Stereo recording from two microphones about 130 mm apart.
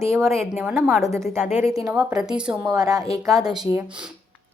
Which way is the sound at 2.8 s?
30° right (ahead or behind).